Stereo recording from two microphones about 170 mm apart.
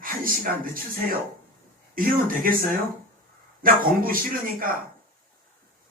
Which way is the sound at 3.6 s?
55° right (ahead or behind).